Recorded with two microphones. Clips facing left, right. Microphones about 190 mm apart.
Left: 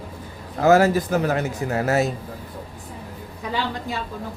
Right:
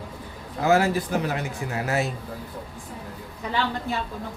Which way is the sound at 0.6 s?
40° left (ahead or behind).